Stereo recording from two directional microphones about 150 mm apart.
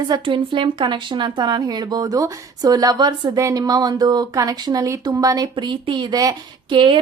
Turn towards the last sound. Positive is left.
turn(degrees=-35)  # may be behind; listen again after turning